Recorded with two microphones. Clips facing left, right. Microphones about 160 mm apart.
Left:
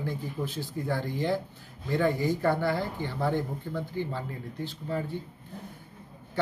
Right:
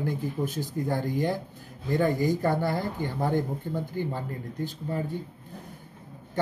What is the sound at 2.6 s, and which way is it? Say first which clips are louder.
Speech: right 1 dB; 45° right (ahead or behind).